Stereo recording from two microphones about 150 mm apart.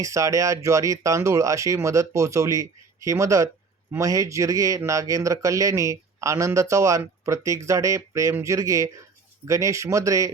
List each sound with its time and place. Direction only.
0.0 s a man's voice: 20° right (ahead or behind)